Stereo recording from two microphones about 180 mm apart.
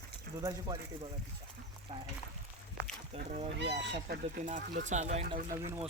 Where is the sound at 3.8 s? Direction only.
70° right (ahead or behind).